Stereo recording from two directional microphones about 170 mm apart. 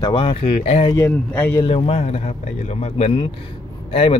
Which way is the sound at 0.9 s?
15° left (ahead or behind).